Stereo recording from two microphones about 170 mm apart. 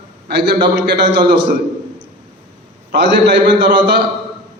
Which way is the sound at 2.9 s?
85° right.